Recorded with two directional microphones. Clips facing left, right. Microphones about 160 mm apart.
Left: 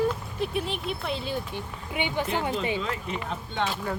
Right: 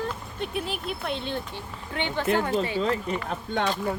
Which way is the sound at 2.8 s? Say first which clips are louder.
Right 6 dB; 35° right (ahead or behind).